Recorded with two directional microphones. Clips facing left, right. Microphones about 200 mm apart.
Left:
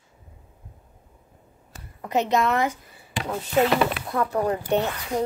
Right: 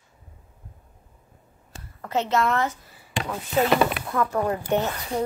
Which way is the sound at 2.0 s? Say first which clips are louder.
Left 1 dB; 15° left (ahead or behind).